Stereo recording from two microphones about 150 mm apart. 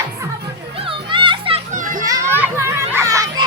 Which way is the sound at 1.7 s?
60° right (ahead or behind).